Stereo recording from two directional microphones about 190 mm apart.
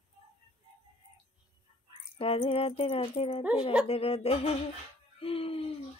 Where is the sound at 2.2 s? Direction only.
30° left (ahead or behind).